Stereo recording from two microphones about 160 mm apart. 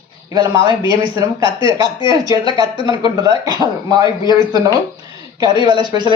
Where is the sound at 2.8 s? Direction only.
25° right (ahead or behind).